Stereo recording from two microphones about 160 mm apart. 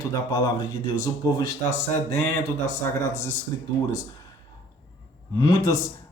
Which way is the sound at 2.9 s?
20° left (ahead or behind).